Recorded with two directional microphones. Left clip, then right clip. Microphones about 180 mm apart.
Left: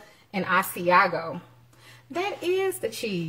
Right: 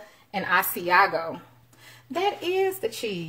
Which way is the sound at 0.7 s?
25° right (ahead or behind).